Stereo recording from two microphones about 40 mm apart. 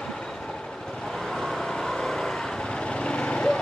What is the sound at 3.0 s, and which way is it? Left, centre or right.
Vehicle, left.